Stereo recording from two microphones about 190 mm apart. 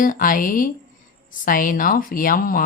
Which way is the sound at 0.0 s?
45° left (ahead or behind).